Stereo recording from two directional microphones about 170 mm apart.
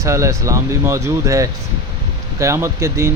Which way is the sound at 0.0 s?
15° right (ahead or behind).